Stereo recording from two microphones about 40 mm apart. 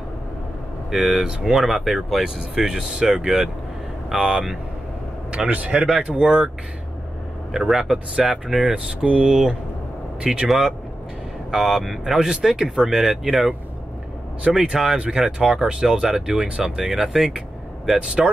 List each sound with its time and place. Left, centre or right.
0.9 s speech: centre
2.6 s speech: centre
5.5 s speech: right
7.5 s speech: centre
8.5 s speech: right
9.3 s speech: centre
11.5 s speech: centre
12.6 s speech: centre
14.5 s speech: centre
16.3 s speech: right
16.9 s speech: centre
17.8 s speech: centre